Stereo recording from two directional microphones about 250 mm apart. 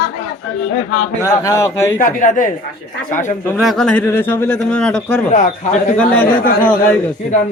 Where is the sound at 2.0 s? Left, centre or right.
Left.